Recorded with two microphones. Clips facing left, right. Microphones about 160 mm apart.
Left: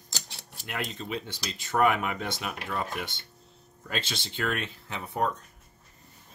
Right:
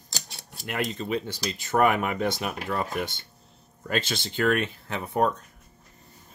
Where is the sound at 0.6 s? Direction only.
50° right (ahead or behind).